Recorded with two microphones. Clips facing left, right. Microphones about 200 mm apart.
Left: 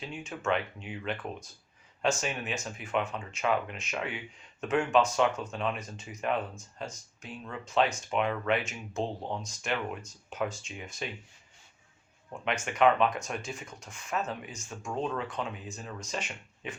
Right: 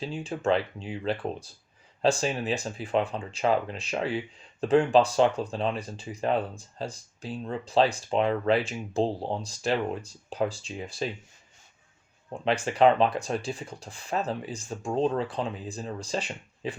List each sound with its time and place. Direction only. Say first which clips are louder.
0.0 s speech: right 6 dB; 30° right (ahead or behind)
12.3 s speech: right 6 dB; 35° right (ahead or behind)